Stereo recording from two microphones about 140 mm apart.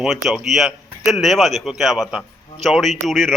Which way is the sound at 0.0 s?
5° right (ahead or behind).